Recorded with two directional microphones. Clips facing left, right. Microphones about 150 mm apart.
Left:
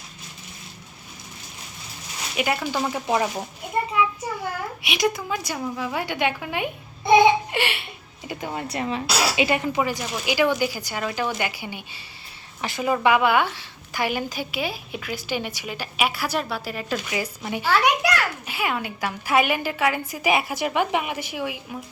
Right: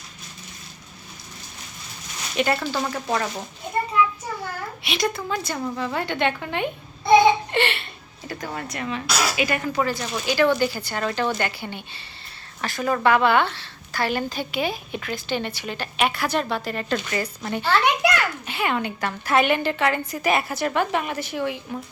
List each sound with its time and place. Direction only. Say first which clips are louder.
2.3 s a woman's voice: right 2 dB; 10° left (ahead or behind)
4.8 s a woman's voice: left 1 dB; 10° left (ahead or behind)
8.3 s speech: left 1 dB; 20° left (ahead or behind)
8.7 s a woman's voice: left 2 dB; 30° left (ahead or behind); by 21.8 s 10° left (ahead or behind)